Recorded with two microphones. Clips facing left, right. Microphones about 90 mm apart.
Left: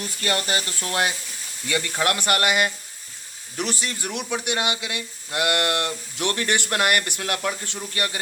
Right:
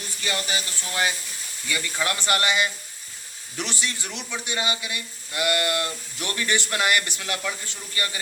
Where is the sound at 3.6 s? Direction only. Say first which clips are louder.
Left 3 dB; 40° left (ahead or behind).